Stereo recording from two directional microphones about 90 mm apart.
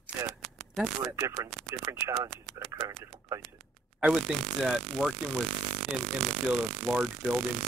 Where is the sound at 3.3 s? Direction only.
35° right (ahead or behind).